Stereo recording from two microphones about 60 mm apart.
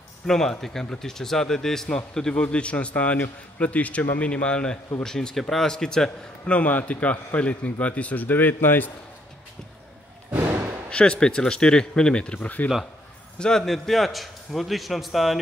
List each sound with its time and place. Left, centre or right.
0.3 s a man's voice: centre
6.4 s a man's voice: left
10.9 s speech: centre
12.4 s a man's voice: left
13.4 s a man's voice: centre